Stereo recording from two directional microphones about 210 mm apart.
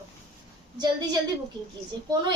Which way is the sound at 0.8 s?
20° right (ahead or behind).